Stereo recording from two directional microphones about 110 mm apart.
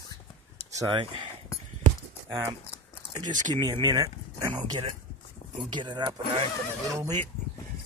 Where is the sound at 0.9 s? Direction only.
50° right (ahead or behind).